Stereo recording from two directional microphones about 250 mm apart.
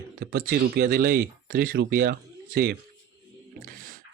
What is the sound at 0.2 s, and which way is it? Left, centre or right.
Speech, right.